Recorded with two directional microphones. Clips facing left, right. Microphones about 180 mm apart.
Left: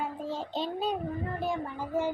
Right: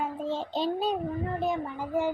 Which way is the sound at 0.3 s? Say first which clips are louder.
Right 6 dB; 30° right (ahead or behind).